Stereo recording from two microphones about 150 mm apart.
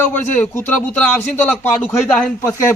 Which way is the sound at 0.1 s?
15° left (ahead or behind).